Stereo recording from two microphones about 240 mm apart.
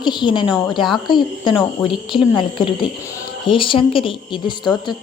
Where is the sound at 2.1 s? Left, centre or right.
Centre.